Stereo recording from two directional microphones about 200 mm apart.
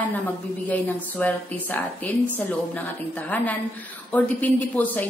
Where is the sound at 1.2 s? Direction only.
10° left (ahead or behind).